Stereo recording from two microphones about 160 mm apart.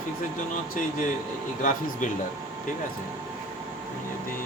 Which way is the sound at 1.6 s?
55° left (ahead or behind).